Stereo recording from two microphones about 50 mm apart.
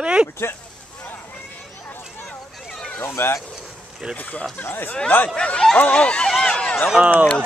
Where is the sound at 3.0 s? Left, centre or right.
Left.